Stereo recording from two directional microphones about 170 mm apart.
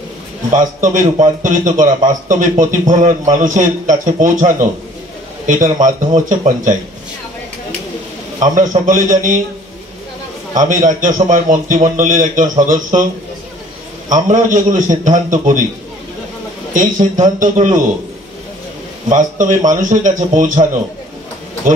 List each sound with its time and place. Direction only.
0.5 s a man's voice: 50° right (ahead or behind)
8.4 s a man's voice: 50° right (ahead or behind)
10.5 s a man's voice: 50° right (ahead or behind)
14.0 s a man's voice: 50° right (ahead or behind)
16.7 s a man's voice: 50° right (ahead or behind)
19.0 s a man's voice: 50° right (ahead or behind)